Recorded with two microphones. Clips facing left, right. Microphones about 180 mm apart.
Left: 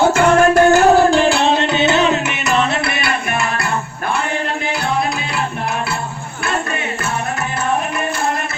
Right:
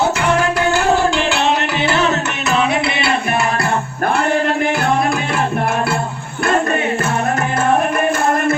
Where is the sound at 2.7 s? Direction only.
20° right (ahead or behind).